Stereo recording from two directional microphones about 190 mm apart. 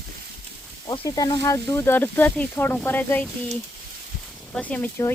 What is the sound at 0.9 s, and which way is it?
Speech, 20° left (ahead or behind).